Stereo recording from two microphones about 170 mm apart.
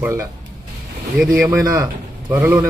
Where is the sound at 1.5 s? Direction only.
15° right (ahead or behind).